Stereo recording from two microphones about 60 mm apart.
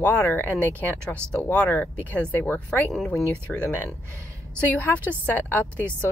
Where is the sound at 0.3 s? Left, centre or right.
Left.